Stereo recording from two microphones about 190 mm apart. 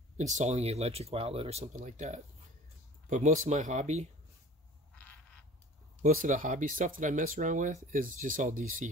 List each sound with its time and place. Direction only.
0.2 s speech: 35° right (ahead or behind)
6.0 s speech: 45° right (ahead or behind)